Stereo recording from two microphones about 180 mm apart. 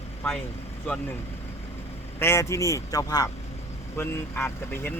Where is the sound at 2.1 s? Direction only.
15° left (ahead or behind).